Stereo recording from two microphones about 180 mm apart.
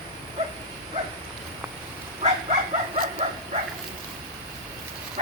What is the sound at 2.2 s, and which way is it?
Livestock, 35° right (ahead or behind).